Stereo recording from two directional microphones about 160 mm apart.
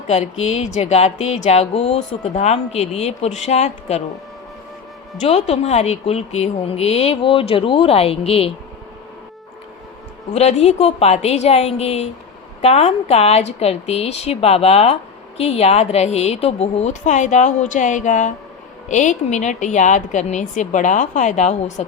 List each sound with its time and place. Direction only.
0.1 s music: 40° left (ahead or behind)
5.2 s speech: 45° left (ahead or behind)
10.3 s speech: 40° left (ahead or behind)
15.4 s music: 40° left (ahead or behind)